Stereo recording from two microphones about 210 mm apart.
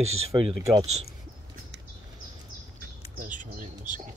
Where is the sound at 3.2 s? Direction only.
40° right (ahead or behind).